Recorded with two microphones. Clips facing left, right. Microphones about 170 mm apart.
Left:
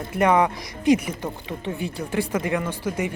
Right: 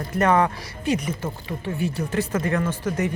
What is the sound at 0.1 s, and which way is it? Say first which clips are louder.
Speech: left 1 dB; 15° left (ahead or behind).